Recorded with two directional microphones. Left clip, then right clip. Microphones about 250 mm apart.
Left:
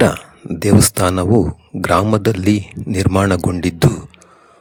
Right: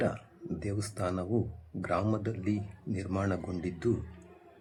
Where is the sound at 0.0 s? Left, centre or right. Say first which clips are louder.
Left 18 dB; left.